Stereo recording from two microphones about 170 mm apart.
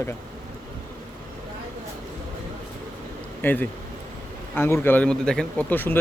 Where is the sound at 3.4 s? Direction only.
10° left (ahead or behind).